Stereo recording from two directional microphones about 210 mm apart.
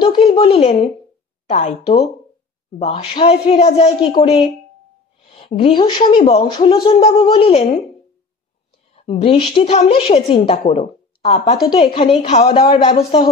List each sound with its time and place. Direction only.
0.0 s speech: 25° left (ahead or behind)
5.6 s speech: 20° left (ahead or behind)
8.9 s speech: 25° left (ahead or behind)